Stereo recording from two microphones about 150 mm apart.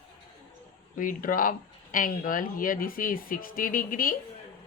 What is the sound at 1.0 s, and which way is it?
Speech, 65° left (ahead or behind).